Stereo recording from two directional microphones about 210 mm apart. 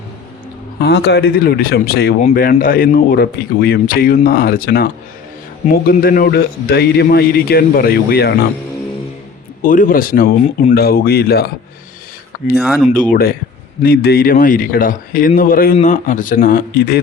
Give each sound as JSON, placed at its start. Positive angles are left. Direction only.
{"t": 0.8, "sound": "speech", "side_deg": 55}
{"t": 5.9, "sound": "speech", "side_deg": 45}
{"t": 9.6, "sound": "speech", "side_deg": 40}
{"t": 12.5, "sound": "speech", "side_deg": -5}
{"t": 12.9, "sound": "speech", "side_deg": 40}